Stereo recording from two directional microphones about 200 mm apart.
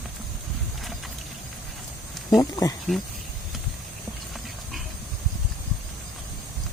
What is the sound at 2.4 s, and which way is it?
Speech, 15° left (ahead or behind).